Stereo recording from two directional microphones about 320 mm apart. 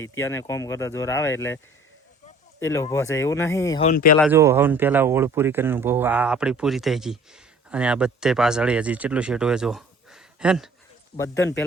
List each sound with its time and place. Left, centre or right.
0.0 s speech: centre
2.6 s speech: centre
3.8 s speech: left
4.2 s speech: centre